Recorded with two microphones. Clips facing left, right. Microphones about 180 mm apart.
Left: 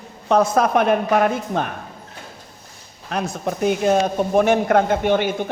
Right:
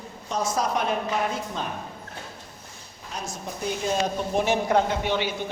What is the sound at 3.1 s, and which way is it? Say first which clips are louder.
A man's voice: left 11 dB; 65° left (ahead or behind).